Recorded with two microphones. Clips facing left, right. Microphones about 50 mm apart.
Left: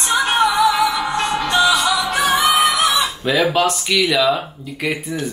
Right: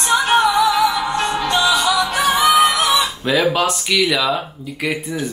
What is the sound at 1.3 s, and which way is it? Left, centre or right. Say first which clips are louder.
Music: left 2 dB; left.